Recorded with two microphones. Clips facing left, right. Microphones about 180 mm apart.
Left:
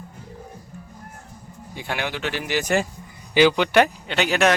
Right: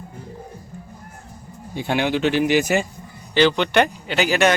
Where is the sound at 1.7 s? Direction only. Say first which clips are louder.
Right 7 dB; 25° right (ahead or behind).